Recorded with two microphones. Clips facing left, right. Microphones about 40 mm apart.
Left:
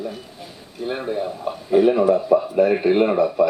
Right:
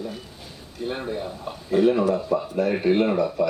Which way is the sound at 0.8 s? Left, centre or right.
Centre.